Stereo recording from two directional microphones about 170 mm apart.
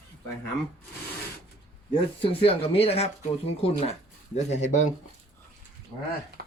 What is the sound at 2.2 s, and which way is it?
Speech, 35° left (ahead or behind).